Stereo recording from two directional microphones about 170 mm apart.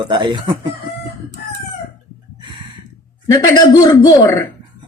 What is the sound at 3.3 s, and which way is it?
Speech, 25° left (ahead or behind).